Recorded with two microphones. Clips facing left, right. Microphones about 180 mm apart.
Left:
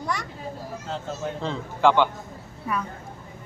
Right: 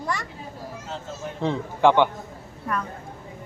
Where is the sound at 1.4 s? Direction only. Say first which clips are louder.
Right 2 dB; 15° right (ahead or behind).